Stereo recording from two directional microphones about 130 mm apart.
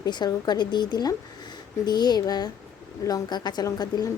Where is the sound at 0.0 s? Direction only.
30° left (ahead or behind).